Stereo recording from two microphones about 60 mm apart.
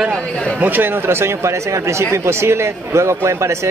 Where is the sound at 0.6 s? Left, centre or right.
Right.